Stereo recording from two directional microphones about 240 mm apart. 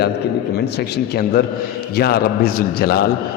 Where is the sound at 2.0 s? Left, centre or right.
Left.